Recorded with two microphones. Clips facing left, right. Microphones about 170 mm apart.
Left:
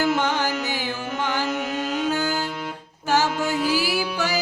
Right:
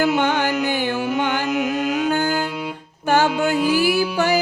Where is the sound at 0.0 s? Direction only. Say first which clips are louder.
Right 3 dB; 60° right (ahead or behind).